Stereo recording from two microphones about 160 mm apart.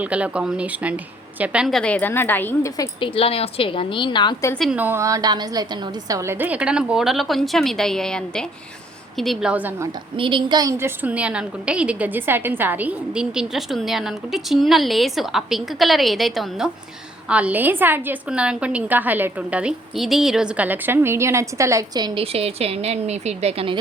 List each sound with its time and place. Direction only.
0.0 s a woman's voice: 10° right (ahead or behind); by 3.1 s 20° left (ahead or behind)
3.2 s a woman's voice: 40° left (ahead or behind)
4.5 s a woman's voice: centre (ahead or behind)
4.8 s a woman's voice: 15° right (ahead or behind)
10.2 s a woman's voice: 30° right (ahead or behind)